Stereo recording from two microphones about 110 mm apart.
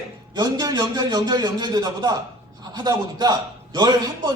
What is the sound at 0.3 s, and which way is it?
Speech, 40° right (ahead or behind).